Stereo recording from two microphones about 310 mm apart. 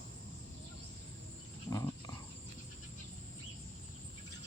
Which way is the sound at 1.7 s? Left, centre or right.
Centre.